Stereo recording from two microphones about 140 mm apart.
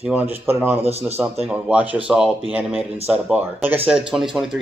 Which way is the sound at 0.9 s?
45° right (ahead or behind).